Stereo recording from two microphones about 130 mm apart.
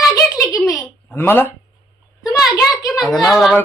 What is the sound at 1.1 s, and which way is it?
Speech, 15° left (ahead or behind).